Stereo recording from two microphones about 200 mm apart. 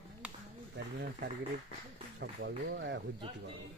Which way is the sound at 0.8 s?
60° right (ahead or behind).